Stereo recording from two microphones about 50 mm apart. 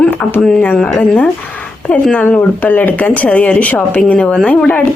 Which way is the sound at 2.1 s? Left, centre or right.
Left.